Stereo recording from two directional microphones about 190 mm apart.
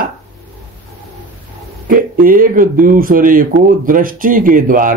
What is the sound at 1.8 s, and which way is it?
Speech, 45° right (ahead or behind).